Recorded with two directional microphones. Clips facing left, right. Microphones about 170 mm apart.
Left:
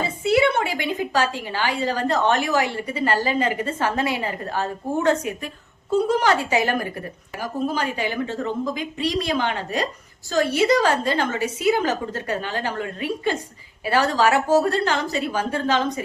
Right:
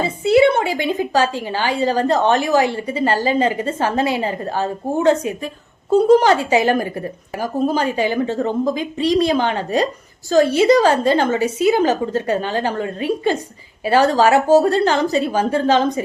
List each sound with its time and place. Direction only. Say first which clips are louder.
0.0 s a woman's voice: right 6 dB; 25° right (ahead or behind)
7.3 s a woman's voice: right 6 dB; 35° right (ahead or behind)